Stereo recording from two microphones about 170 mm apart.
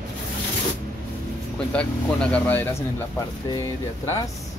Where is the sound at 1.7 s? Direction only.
5° left (ahead or behind).